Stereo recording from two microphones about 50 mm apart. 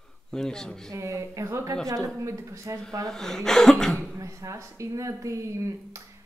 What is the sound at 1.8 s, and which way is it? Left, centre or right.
Speech, right.